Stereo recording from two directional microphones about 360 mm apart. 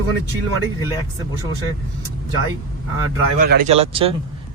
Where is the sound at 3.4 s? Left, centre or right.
Right.